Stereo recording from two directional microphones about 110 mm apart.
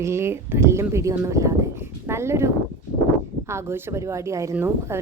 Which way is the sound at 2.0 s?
25° right (ahead or behind).